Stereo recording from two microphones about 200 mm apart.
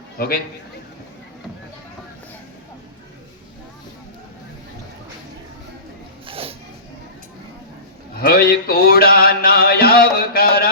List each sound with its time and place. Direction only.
0.2 s music: 50° left (ahead or behind)
6.2 s a sound: 30° right (ahead or behind)
8.2 s music: 50° left (ahead or behind)